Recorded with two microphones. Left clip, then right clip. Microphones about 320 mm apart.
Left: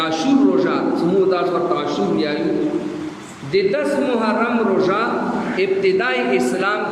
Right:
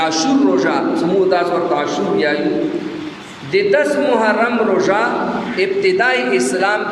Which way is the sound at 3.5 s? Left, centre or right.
Right.